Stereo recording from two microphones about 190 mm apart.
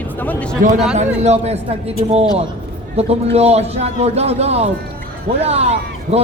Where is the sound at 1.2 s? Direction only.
35° right (ahead or behind).